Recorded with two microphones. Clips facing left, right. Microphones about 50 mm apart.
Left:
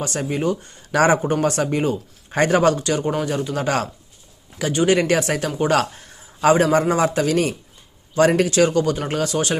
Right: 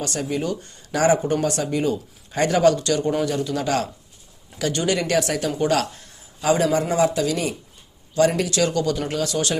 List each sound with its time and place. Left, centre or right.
0.1 s speech: left
1.2 s speech: left
2.7 s speech: left
4.5 s speech: centre
4.9 s a man's voice: left
8.4 s speech: left